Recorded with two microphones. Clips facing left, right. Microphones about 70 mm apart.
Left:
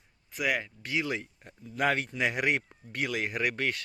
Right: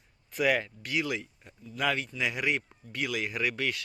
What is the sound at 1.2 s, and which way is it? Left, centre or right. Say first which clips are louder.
Speech: left 1 dB; left.